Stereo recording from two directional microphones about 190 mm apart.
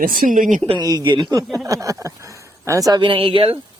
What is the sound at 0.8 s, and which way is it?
Speech, 20° right (ahead or behind).